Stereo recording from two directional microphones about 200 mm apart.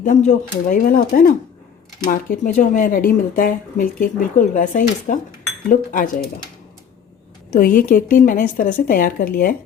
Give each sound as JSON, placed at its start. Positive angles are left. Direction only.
{"t": 0.0, "sound": "speech", "side_deg": 35}
{"t": 7.5, "sound": "speech", "side_deg": 45}